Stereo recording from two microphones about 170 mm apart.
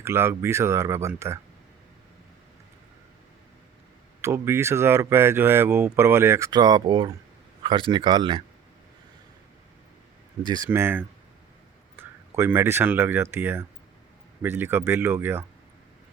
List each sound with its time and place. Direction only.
0.0 s speech: 15° right (ahead or behind)
4.2 s speech: 15° right (ahead or behind)
10.4 s speech: 25° right (ahead or behind)
10.7 s speech: 10° right (ahead or behind)